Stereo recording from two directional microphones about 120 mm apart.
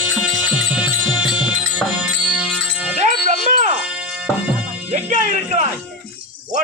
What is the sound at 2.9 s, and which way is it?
Wind chime, 90° right.